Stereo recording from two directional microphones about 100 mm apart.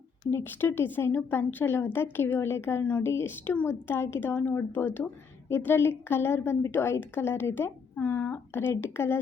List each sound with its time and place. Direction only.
0.3 s speech: 20° left (ahead or behind)